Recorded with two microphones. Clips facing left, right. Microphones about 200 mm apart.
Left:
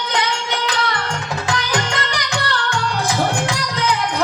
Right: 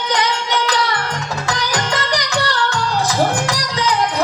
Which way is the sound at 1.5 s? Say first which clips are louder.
Right 1 dB; 60° left (ahead or behind).